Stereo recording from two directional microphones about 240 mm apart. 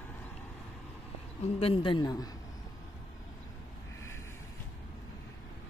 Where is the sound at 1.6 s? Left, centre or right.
Left.